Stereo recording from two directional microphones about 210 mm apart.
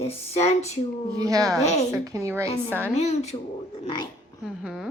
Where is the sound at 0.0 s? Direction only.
30° left (ahead or behind).